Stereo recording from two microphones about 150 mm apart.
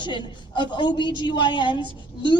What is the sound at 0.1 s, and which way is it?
A woman's voice, 30° left (ahead or behind).